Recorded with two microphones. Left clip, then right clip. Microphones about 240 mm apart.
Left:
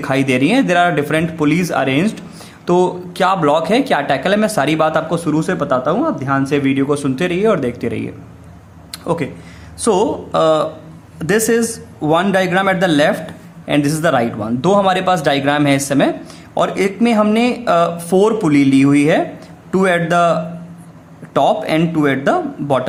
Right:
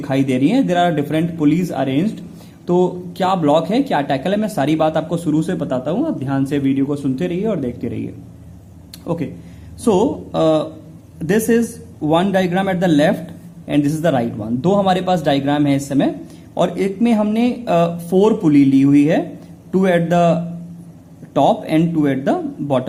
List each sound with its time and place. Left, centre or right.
0.0 s speech: centre
8.9 s a sound: centre
9.8 s speech: centre